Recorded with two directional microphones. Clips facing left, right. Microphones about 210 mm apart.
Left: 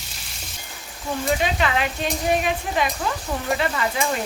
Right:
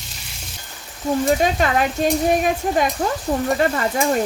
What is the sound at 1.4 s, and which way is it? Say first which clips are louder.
Speech: right 4 dB; 45° right (ahead or behind).